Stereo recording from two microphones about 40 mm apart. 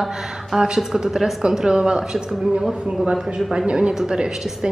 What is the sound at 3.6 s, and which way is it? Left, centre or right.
Speech, right.